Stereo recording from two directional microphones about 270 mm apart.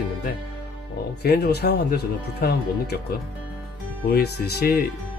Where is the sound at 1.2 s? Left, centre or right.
Left.